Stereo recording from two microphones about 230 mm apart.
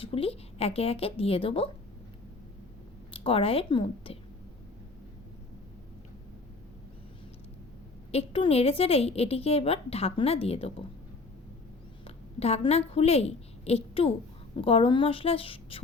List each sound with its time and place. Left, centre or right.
0.0 s a woman's voice: left
3.1 s a woman's voice: left
8.1 s a woman's voice: left
12.0 s a woman's voice: left